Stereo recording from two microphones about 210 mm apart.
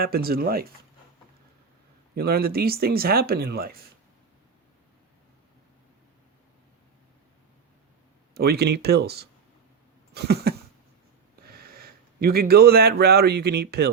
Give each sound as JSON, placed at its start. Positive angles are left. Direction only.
{"t": 0.0, "sound": "speech", "side_deg": -45}
{"t": 2.1, "sound": "speech", "side_deg": -45}
{"t": 8.4, "sound": "speech", "side_deg": -50}
{"t": 11.5, "sound": "speech", "side_deg": -45}